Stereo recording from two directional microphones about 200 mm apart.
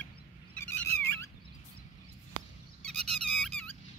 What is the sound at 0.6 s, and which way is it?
Cat, 10° left (ahead or behind).